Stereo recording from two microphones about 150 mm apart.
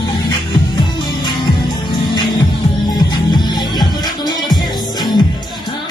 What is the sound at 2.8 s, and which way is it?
Music, 30° left (ahead or behind).